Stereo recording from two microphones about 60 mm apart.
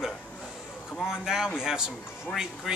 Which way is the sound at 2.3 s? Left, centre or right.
Left.